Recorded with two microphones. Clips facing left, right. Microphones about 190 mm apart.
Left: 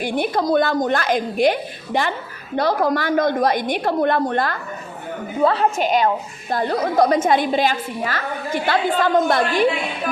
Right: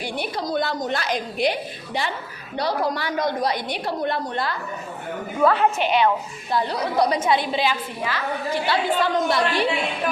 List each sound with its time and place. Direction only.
0.0 s a woman's voice: 50° left (ahead or behind)
5.4 s a woman's voice: 30° left (ahead or behind)
5.7 s a woman's voice: 40° left (ahead or behind)